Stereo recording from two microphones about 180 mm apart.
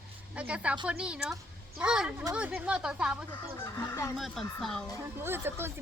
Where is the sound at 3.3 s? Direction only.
15° left (ahead or behind).